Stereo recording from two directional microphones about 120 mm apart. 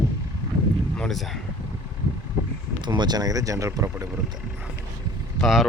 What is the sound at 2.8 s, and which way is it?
Speech, 40° right (ahead or behind).